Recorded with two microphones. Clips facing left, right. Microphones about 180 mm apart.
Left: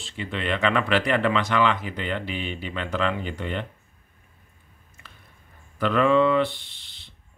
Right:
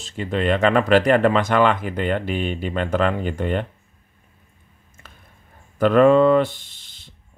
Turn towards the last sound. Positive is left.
turn(degrees=-45)  # may be behind; listen again after turning